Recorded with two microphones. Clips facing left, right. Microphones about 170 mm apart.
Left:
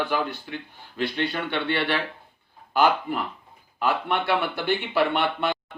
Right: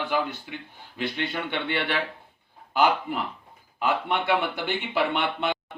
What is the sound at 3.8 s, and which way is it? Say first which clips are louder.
Speech: left 1 dB; 20° right (ahead or behind).